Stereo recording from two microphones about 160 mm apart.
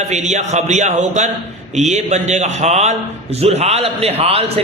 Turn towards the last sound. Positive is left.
turn(degrees=-40)  # may be behind; listen again after turning